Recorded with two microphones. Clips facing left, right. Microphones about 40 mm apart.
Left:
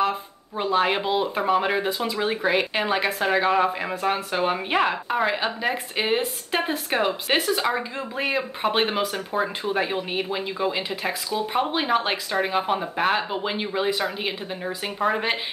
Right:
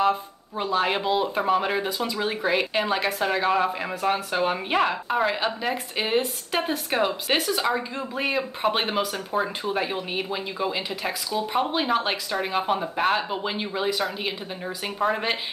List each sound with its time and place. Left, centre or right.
0.6 s speech: centre